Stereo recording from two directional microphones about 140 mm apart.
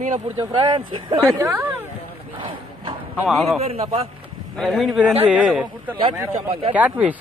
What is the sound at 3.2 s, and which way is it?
Speech, centre (ahead or behind).